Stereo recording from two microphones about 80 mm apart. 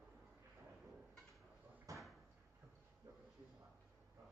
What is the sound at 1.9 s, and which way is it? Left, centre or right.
Door, right.